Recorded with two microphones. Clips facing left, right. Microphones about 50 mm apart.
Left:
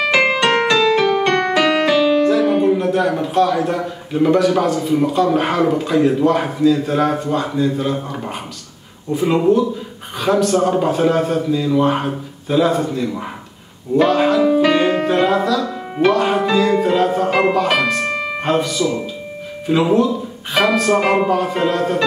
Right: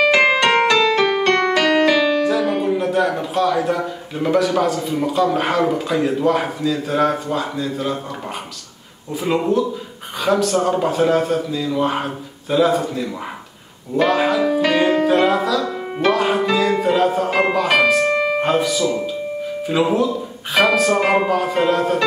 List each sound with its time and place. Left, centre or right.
0.7 s keyboard: centre
1.2 s piano: centre
2.2 s speech: centre
9.1 s speech: centre
14.4 s music: centre
19.7 s speech: centre